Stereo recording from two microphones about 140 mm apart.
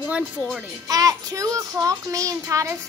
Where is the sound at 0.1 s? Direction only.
Centre (ahead or behind).